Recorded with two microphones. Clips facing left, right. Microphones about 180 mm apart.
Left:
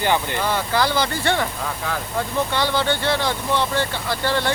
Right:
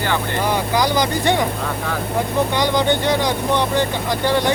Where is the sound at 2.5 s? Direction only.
15° right (ahead or behind).